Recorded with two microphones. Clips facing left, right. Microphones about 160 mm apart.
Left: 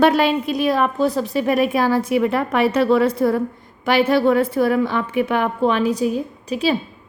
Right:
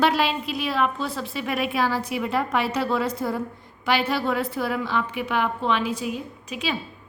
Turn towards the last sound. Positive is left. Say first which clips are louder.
# left 9 dB
turn(degrees=35)  # may be behind; listen again after turning